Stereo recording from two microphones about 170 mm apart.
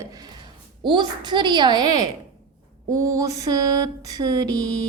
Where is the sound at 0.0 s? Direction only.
20° right (ahead or behind).